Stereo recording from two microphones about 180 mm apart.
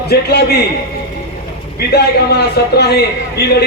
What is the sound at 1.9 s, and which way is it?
Speech, 65° left (ahead or behind).